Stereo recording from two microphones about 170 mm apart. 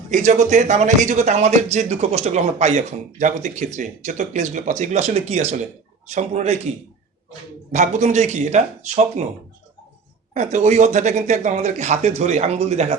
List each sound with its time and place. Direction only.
0.1 s a man's voice: 45° right (ahead or behind)
10.3 s speech: 40° right (ahead or behind)